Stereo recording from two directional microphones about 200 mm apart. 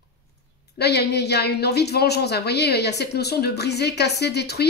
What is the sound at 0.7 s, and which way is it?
A woman's voice, 55° left (ahead or behind).